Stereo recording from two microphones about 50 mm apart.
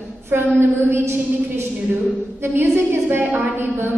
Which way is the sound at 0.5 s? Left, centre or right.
Right.